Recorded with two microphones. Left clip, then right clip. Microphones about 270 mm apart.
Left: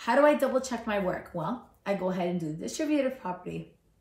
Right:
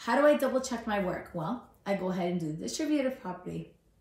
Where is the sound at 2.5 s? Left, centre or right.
Centre.